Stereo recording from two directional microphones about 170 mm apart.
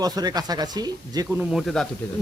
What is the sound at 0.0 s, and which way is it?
Speech, 20° right (ahead or behind).